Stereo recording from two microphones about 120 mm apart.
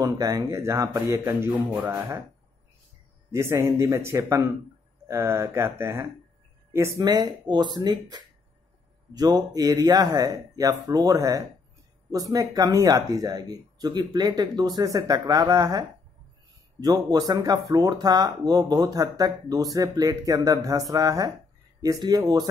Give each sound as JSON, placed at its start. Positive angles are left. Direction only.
{"t": 0.0, "sound": "speech", "side_deg": -30}
{"t": 1.7, "sound": "speech", "side_deg": -10}
{"t": 3.3, "sound": "speech", "side_deg": -20}
{"t": 7.0, "sound": "speech", "side_deg": -35}
{"t": 16.8, "sound": "speech", "side_deg": -35}